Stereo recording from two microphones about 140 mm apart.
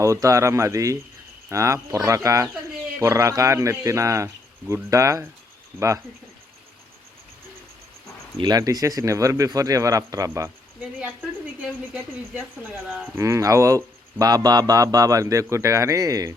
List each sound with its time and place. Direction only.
0.0 s speech: 20° right (ahead or behind)
8.4 s speech: 30° right (ahead or behind)
13.1 s speech: 20° right (ahead or behind)